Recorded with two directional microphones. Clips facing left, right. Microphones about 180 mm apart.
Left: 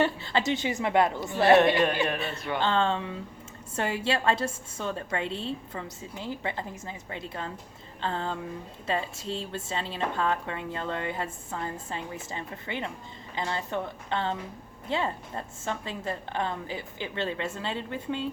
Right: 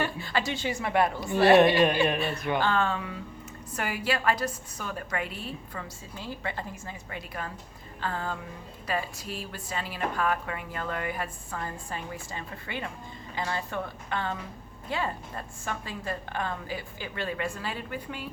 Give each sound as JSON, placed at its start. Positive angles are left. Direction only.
{"t": 0.0, "sound": "a woman's voice", "side_deg": 25}